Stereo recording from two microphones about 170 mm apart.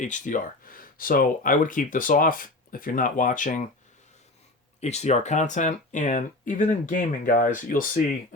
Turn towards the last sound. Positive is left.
turn(degrees=50)  # may be behind; listen again after turning